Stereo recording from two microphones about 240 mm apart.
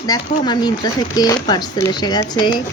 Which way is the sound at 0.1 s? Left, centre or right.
Centre.